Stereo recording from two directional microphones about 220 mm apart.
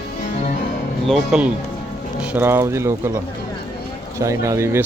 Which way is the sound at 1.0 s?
Centre (ahead or behind).